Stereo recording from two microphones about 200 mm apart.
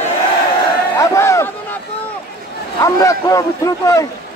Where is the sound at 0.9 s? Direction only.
15° left (ahead or behind).